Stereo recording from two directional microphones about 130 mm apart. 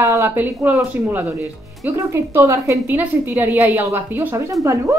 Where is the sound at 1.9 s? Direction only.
20° right (ahead or behind).